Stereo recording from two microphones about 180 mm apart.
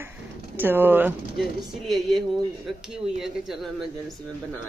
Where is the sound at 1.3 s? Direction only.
Centre (ahead or behind).